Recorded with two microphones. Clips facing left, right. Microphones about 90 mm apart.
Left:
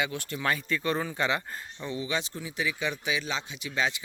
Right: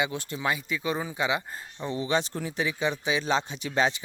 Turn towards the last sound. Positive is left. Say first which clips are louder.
# right 4 dB
turn(degrees=-35)  # may be behind; listen again after turning